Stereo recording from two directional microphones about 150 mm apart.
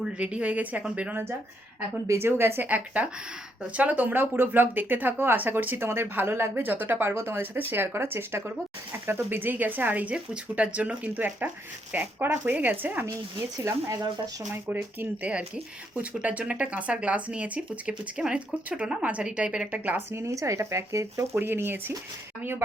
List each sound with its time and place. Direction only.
0.0 s speech: 10° right (ahead or behind)